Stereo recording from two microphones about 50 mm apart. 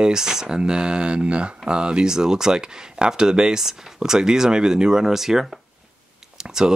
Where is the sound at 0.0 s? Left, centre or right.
Centre.